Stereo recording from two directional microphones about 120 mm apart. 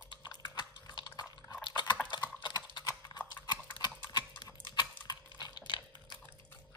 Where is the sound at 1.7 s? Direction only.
40° left (ahead or behind).